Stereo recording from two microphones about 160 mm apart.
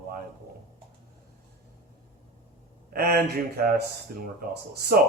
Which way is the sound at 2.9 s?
75° right (ahead or behind).